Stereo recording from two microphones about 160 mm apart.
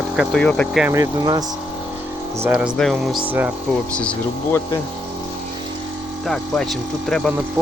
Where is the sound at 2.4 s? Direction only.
10° right (ahead or behind).